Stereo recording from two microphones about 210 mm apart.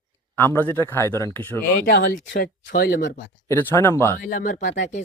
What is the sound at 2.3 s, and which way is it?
Speech, 55° left (ahead or behind).